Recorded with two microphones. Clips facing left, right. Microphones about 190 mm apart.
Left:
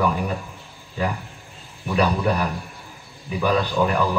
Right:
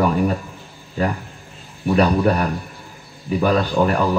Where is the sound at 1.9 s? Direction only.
50° right (ahead or behind).